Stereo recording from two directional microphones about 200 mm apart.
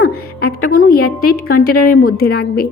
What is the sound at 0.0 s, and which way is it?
Music, 50° left (ahead or behind).